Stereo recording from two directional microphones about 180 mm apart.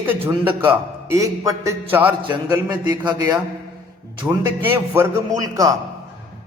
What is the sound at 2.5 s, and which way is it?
A man's voice, 20° right (ahead or behind).